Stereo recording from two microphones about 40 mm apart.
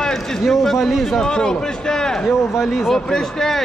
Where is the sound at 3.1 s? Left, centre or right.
Centre.